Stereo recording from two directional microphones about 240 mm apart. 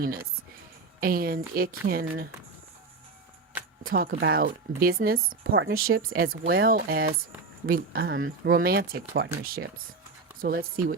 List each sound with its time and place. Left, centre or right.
0.0 s speech: right
3.8 s speech: right